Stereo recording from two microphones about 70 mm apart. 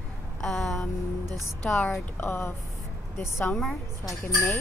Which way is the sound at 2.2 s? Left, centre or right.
Left.